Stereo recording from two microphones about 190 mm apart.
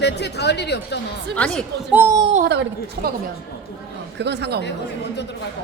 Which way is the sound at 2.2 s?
35° right (ahead or behind).